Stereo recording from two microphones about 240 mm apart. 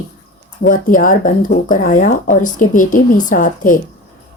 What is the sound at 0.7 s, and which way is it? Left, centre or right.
A woman's voice, left.